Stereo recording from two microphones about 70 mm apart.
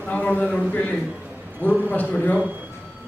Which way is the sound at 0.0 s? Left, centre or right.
Left.